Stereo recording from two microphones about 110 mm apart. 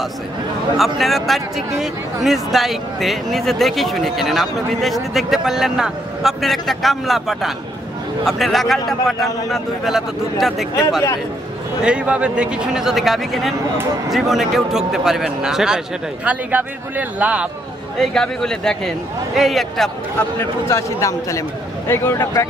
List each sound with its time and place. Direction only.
0.7 s speech: centre (ahead or behind)
17.9 s speech: 5° left (ahead or behind)
20.2 s a man's voice: 20° left (ahead or behind)